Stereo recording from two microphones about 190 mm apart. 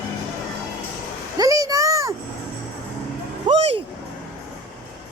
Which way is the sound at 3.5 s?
25° right (ahead or behind).